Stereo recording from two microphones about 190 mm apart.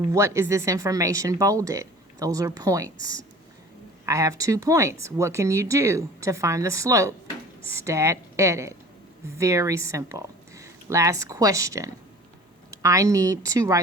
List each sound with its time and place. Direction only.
0.0 s speech: 15° right (ahead or behind)